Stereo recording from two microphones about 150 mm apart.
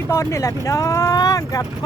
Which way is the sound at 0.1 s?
20° left (ahead or behind).